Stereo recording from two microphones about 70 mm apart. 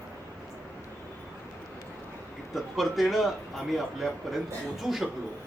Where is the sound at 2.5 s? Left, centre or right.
Centre.